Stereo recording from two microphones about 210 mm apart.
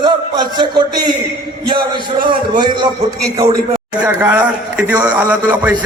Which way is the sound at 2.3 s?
20° right (ahead or behind).